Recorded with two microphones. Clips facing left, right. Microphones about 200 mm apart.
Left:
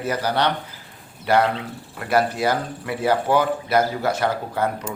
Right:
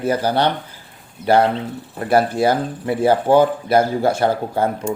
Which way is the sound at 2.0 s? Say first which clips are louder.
Right 4 dB; 30° right (ahead or behind).